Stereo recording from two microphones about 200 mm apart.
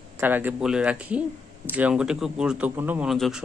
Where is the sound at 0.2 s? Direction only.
10° right (ahead or behind).